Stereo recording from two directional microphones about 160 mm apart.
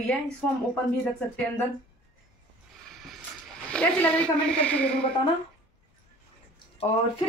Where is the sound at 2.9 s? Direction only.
Centre (ahead or behind).